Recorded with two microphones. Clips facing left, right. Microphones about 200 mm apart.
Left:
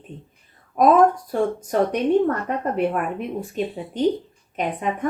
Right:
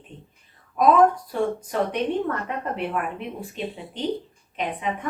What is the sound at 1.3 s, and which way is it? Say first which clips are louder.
Speech: left 3 dB; 45° left (ahead or behind).